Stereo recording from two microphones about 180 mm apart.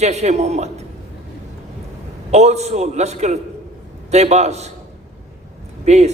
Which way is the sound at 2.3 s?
40° right (ahead or behind).